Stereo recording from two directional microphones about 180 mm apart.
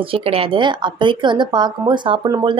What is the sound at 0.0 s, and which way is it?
A woman's voice, 30° right (ahead or behind).